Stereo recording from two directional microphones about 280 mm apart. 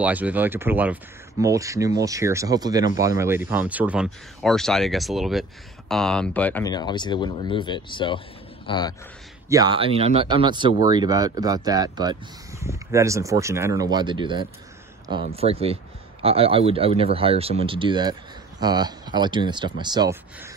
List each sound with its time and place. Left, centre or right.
0.0 s a man's voice: centre
9.5 s speech: centre